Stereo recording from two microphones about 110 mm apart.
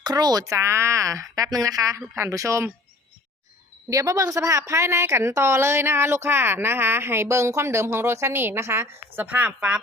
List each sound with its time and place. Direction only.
0.0 s a woman's voice: 35° right (ahead or behind)
3.8 s a woman's voice: 30° right (ahead or behind); by 9.8 s 10° right (ahead or behind)